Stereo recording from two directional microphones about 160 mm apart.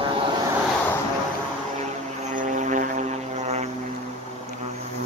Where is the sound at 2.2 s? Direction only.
50° right (ahead or behind).